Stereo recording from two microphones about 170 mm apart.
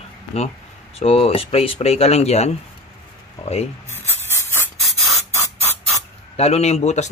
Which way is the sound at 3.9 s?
15° left (ahead or behind).